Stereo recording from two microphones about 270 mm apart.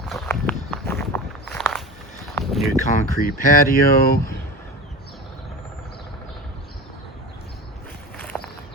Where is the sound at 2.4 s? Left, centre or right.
Centre.